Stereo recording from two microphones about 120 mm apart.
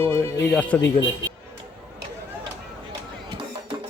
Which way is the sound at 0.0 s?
20° left (ahead or behind).